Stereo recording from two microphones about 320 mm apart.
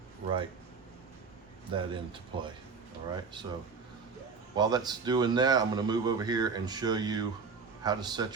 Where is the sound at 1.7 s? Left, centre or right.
Centre.